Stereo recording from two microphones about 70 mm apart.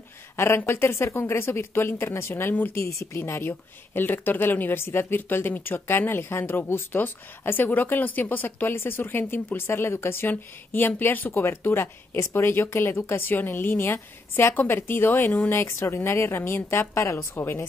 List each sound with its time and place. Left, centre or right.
0.7 s speech: left
2.7 s speech: left